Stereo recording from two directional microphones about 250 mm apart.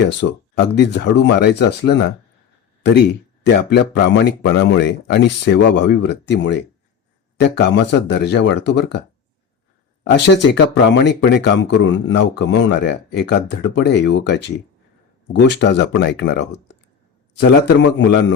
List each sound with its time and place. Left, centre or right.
0.0 s speech: left
3.4 s speech: left
10.1 s speech: left